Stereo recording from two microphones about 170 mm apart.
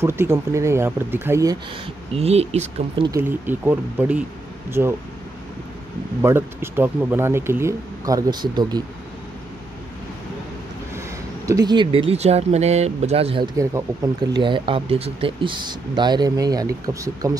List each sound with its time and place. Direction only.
0.0 s speech: 15° right (ahead or behind)
2.1 s speech: 35° right (ahead or behind)
3.2 s speech: 10° right (ahead or behind)
6.2 s speech: 15° right (ahead or behind)
11.4 s speech: 20° right (ahead or behind)
13.6 s speech: 20° right (ahead or behind)